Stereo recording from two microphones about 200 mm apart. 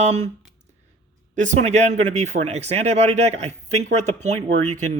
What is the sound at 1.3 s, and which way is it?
Speech, 40° right (ahead or behind).